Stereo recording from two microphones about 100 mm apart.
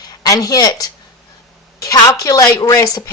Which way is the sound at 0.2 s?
35° left (ahead or behind).